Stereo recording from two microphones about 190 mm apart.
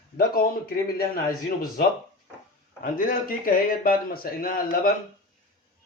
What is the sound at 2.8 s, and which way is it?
Speech, 50° left (ahead or behind).